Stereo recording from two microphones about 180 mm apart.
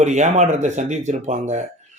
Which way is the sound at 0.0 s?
40° right (ahead or behind).